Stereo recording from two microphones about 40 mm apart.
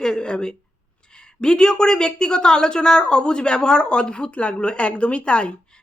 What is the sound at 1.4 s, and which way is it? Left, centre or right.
A woman's voice, left.